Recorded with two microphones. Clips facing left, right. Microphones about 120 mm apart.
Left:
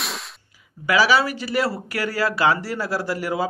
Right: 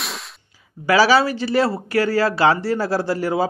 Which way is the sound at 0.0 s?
Centre (ahead or behind).